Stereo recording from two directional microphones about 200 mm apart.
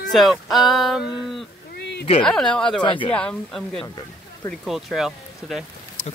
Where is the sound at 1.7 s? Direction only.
55° left (ahead or behind).